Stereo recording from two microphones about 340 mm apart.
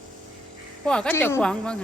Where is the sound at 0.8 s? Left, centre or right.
Centre.